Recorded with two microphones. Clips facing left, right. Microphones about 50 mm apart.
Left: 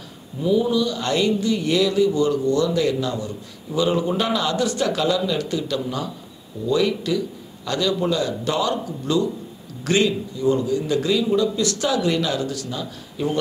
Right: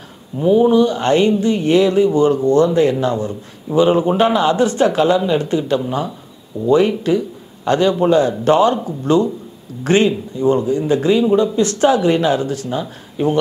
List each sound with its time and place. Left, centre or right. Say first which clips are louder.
0.4 s speech: right 8 dB; right